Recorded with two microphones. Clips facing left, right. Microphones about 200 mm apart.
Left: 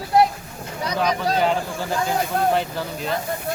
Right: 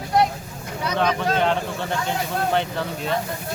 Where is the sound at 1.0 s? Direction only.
10° left (ahead or behind).